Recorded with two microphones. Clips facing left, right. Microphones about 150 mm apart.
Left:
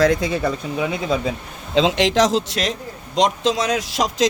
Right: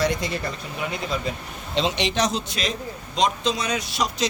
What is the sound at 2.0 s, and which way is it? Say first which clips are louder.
A man's voice: left 7 dB; 90° left.